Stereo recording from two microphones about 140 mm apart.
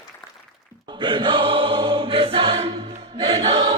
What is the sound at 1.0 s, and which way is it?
Choir, 35° right (ahead or behind).